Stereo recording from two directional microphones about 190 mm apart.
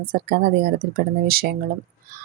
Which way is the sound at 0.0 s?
50° right (ahead or behind).